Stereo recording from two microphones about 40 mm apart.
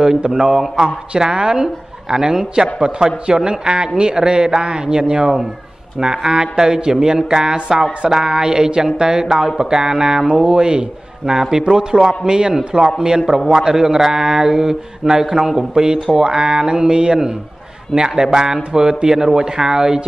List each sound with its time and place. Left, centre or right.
0.0 s a man's voice: centre